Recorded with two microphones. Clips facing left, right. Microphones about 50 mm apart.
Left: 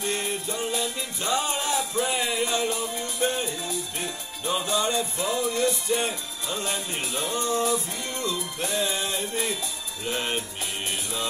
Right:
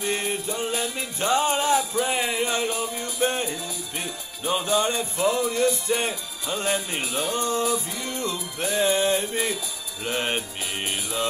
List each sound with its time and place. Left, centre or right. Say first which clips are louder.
0.0 s music: right 2 dB; right
0.7 s music: right 1 dB; right
4.6 s music: right 2 dB; right
7.5 s music: even; left
8.2 s music: even; right